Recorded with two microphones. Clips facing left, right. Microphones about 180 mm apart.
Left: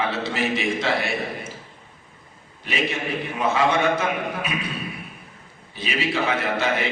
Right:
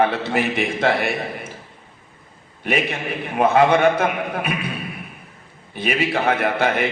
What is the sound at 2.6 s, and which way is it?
A man's voice, 55° right (ahead or behind).